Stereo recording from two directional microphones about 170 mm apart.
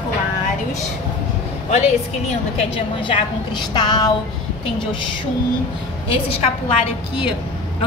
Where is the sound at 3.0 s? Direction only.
25° left (ahead or behind).